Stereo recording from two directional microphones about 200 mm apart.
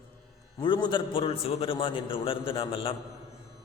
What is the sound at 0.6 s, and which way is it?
A man's voice, 25° left (ahead or behind).